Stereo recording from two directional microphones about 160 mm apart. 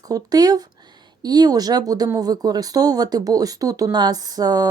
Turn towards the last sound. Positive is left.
turn(degrees=-25)  # may be behind; listen again after turning